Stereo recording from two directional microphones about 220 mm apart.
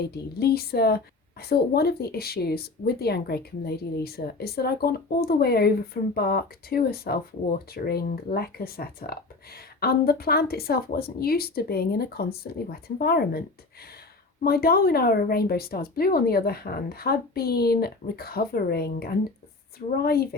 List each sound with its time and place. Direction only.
0.0 s speech: 45° left (ahead or behind)
14.4 s speech: 45° left (ahead or behind)